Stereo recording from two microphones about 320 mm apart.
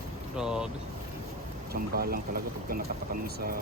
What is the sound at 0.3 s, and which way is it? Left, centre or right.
Speech, centre.